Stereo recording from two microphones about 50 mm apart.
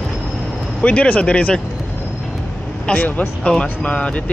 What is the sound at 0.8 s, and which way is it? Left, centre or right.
Speech, left.